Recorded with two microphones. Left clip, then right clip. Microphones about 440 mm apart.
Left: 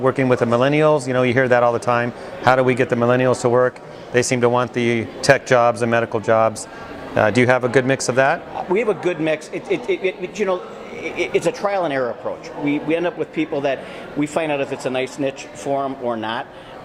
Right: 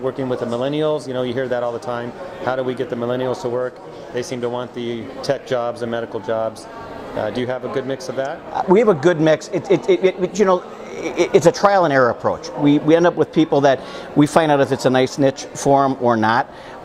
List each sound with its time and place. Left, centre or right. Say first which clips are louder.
0.0 s speech: left 5 dB; left
8.5 s speech: right 5 dB; right